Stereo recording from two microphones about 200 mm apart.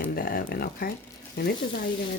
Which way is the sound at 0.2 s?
45° left (ahead or behind).